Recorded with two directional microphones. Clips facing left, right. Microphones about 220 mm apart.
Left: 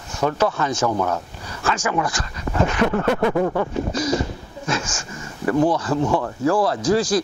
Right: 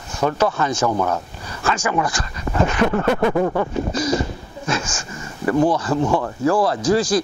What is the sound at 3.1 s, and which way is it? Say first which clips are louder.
Speech: right 1 dB; 25° right (ahead or behind).